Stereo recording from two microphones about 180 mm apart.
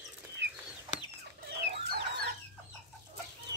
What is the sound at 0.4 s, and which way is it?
Chicken, 75° right (ahead or behind).